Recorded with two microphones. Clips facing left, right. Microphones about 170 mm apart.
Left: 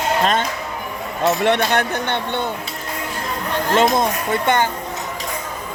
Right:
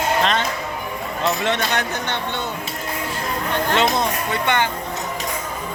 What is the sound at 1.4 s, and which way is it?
Speech, 60° left (ahead or behind).